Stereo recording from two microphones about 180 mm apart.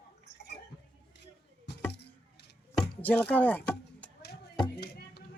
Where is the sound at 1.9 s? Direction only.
65° left (ahead or behind).